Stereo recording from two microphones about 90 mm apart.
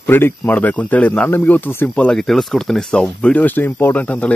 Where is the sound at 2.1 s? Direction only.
5° left (ahead or behind).